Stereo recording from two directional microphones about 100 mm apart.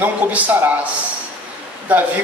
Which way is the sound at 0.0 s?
15° right (ahead or behind).